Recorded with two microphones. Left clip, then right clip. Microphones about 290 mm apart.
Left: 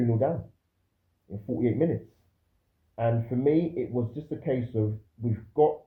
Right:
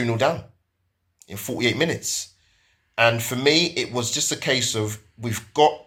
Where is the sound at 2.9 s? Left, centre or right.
Right.